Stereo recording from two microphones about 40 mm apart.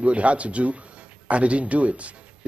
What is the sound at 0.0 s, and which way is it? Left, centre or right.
A man's voice, right.